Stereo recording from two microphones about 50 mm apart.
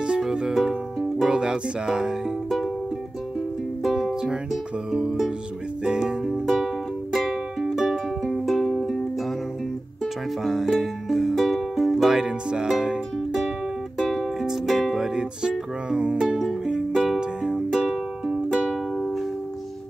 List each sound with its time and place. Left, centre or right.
0.3 s music: centre
3.8 s music: centre
5.9 s music: centre
10.4 s music: centre
13.9 s music: centre
15.9 s music: centre
16.9 s music: centre
17.2 s music: centre
17.6 s music: centre
18.5 s music: centre
18.9 s music: centre